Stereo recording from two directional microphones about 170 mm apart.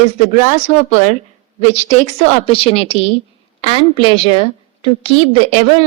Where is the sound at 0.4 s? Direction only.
45° left (ahead or behind).